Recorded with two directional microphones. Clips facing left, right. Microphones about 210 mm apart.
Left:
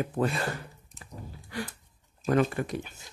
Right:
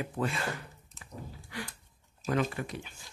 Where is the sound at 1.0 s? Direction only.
40° left (ahead or behind).